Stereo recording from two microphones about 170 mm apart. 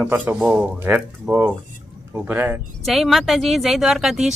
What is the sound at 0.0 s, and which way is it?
Speech, 10° right (ahead or behind).